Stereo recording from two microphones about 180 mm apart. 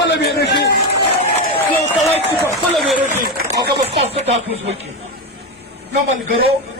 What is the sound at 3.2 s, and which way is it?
Speech, 65° right (ahead or behind).